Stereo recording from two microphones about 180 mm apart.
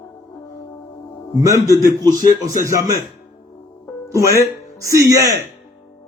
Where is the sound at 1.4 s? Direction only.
20° right (ahead or behind).